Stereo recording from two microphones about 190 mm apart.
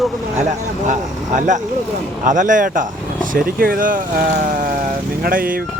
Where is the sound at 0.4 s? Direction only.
40° right (ahead or behind).